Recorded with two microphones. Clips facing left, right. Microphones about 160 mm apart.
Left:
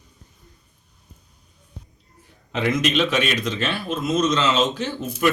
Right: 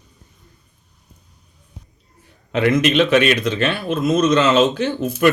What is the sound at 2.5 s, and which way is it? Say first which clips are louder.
A man's voice: right 6 dB; 60° right (ahead or behind).